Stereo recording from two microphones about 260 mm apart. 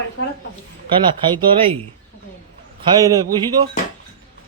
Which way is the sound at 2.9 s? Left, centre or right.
Centre.